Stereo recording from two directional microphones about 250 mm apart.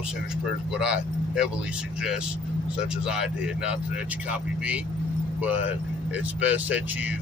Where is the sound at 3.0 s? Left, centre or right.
Centre.